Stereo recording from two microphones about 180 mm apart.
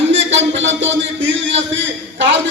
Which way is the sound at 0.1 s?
90° right.